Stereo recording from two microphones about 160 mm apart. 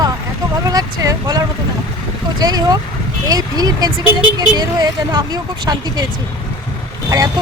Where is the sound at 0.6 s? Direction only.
20° right (ahead or behind).